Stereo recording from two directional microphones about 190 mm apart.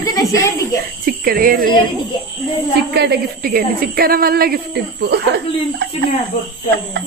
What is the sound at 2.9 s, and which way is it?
A woman's voice, 55° right (ahead or behind).